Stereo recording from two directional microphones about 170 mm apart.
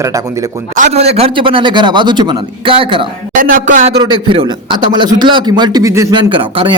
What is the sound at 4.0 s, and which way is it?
A man's voice, 30° right (ahead or behind).